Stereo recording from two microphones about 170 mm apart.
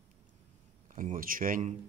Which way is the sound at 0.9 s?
50° right (ahead or behind).